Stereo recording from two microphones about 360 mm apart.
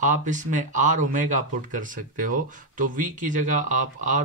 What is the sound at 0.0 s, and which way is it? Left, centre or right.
Speech, right.